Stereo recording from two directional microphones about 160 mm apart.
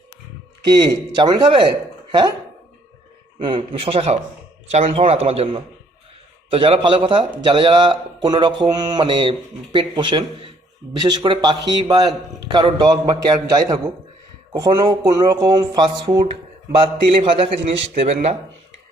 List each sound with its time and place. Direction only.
0.6 s a man's voice: 25° right (ahead or behind)
3.4 s a man's voice: 30° right (ahead or behind)
6.5 s a man's voice: 35° right (ahead or behind)